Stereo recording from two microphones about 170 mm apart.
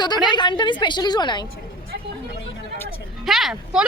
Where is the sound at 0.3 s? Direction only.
25° left (ahead or behind).